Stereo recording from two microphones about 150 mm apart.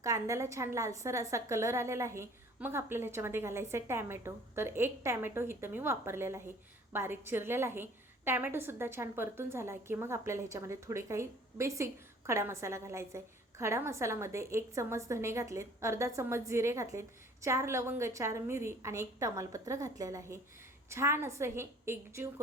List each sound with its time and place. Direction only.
0.0 s a woman's voice: 20° right (ahead or behind)